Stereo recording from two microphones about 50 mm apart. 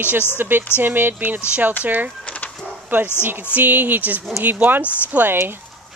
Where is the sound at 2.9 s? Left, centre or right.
Right.